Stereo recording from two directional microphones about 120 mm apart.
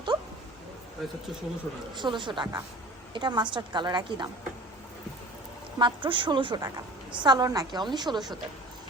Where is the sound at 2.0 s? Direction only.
40° right (ahead or behind).